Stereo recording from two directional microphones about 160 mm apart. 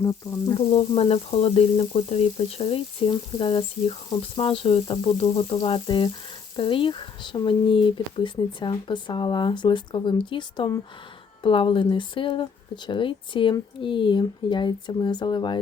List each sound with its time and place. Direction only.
0.0 s speech: 20° left (ahead or behind)
0.7 s frying: 35° left (ahead or behind)
6.6 s speech: 30° left (ahead or behind)